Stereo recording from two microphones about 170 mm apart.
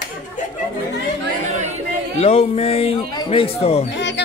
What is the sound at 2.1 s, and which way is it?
A man's voice, 35° left (ahead or behind).